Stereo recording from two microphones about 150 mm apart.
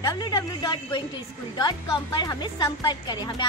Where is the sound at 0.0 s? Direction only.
25° left (ahead or behind).